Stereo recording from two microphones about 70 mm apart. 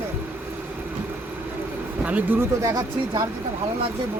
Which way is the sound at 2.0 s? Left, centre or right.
Right.